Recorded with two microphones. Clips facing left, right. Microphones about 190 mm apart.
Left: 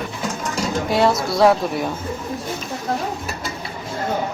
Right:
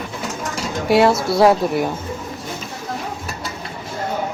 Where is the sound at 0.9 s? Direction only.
5° right (ahead or behind).